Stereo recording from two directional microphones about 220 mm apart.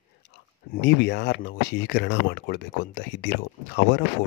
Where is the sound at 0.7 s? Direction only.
50° left (ahead or behind).